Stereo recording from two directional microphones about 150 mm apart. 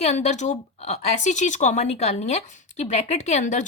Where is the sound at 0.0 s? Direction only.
50° left (ahead or behind).